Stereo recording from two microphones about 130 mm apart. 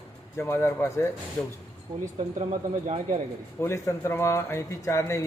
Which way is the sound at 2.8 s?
45° right (ahead or behind).